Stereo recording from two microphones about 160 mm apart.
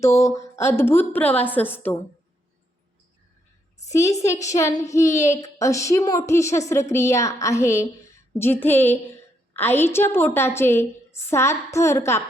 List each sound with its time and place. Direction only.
0.0 s a woman's voice: 20° left (ahead or behind)
3.8 s a woman's voice: 20° left (ahead or behind)
5.1 s a woman's voice: 45° left (ahead or behind)
5.4 s a woman's voice: 20° left (ahead or behind)